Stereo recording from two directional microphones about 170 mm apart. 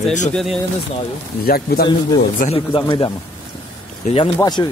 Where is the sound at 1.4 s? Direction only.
60° left (ahead or behind).